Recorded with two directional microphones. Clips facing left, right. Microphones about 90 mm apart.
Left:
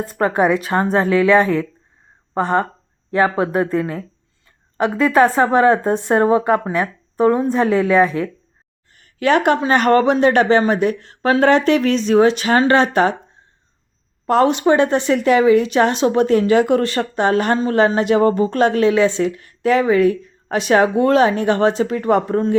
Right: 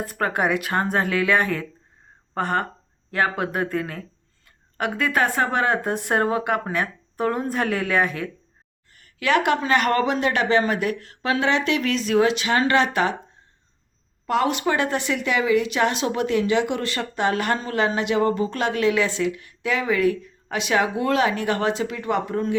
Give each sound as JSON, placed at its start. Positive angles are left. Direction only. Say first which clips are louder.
{"t": 0.0, "sound": "speech", "louder": "left 6 dB", "side_deg": 25}
{"t": 8.9, "sound": "a sound", "louder": "left 5 dB", "side_deg": 35}
{"t": 9.6, "sound": "a woman's voice", "louder": "left 6 dB", "side_deg": 35}
{"t": 11.2, "sound": "a woman's voice", "louder": "left 8 dB", "side_deg": 45}
{"t": 14.3, "sound": "a woman's voice", "louder": "left 7 dB", "side_deg": 35}